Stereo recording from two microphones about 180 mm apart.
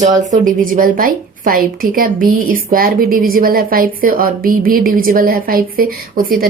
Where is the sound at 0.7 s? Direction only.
50° right (ahead or behind).